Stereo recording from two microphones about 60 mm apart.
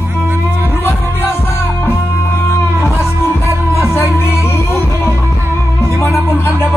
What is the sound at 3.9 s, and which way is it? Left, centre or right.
Music, left.